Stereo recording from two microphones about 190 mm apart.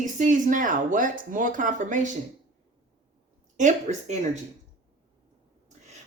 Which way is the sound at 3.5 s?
40° right (ahead or behind).